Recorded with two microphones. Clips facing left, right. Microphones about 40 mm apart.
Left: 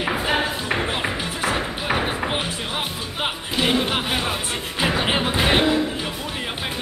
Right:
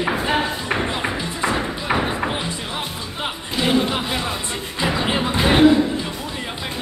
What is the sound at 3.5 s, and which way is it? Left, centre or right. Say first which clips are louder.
Music: right 2 dB; centre.